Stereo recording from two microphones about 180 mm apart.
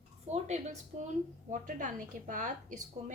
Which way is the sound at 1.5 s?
45° right (ahead or behind).